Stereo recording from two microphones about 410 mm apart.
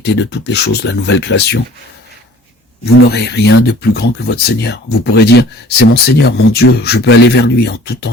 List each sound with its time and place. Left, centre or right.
0.0 s speech: left
2.8 s speech: left